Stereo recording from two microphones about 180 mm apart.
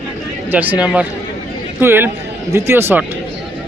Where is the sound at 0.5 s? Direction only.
10° right (ahead or behind).